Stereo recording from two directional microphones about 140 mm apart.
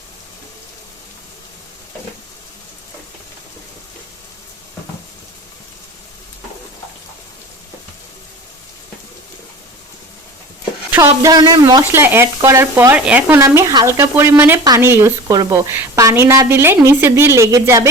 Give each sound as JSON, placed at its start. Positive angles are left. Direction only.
{"t": 10.9, "sound": "a woman's voice", "side_deg": -20}
{"t": 11.8, "sound": "a woman's voice", "side_deg": -15}